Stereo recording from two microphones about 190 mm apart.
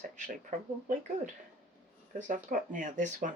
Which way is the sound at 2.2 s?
40° right (ahead or behind).